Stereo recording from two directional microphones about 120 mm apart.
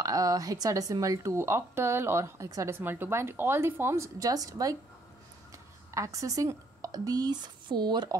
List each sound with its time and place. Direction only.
0.0 s speech: 30° right (ahead or behind)
5.9 s a woman's voice: 25° right (ahead or behind)